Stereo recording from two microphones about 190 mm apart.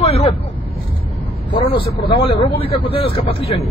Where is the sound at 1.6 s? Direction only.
30° left (ahead or behind).